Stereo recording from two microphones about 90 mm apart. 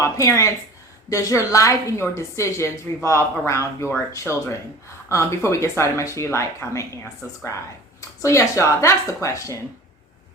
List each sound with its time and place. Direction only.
0.0 s a woman's voice: 30° left (ahead or behind)